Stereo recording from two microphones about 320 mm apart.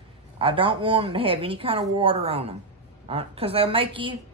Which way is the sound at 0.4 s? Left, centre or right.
Centre.